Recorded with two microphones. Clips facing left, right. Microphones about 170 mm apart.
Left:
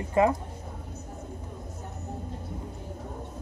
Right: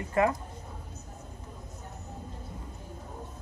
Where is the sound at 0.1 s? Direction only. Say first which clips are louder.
Left 3 dB; 20° left (ahead or behind).